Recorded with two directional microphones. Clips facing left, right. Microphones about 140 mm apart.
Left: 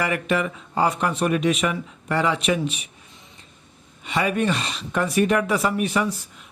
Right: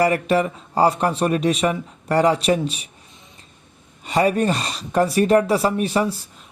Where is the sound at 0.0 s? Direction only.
35° right (ahead or behind).